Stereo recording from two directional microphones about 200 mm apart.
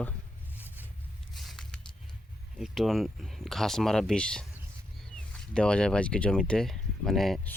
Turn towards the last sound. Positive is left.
turn(degrees=0)  # may be behind; listen again after turning